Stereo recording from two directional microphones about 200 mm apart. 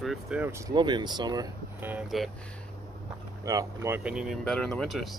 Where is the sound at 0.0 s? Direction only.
Centre (ahead or behind); by 1.5 s 20° right (ahead or behind).